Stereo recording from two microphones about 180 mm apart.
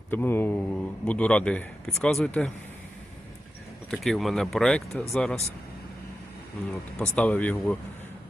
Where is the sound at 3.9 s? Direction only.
Centre (ahead or behind).